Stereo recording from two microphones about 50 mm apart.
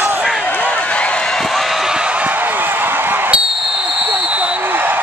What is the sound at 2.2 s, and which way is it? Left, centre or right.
Basketball bounce, right.